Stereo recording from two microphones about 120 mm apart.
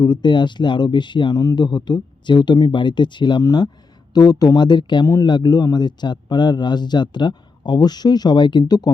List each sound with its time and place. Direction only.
0.0 s a man's voice: 40° left (ahead or behind)